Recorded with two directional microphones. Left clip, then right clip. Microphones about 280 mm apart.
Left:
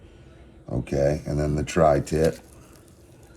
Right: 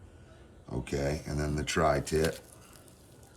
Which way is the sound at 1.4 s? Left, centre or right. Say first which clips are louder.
Left 8 dB; centre.